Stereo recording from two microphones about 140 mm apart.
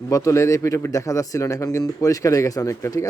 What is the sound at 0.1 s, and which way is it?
Speech, 20° left (ahead or behind).